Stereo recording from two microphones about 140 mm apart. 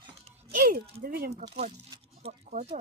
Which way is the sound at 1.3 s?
50° right (ahead or behind).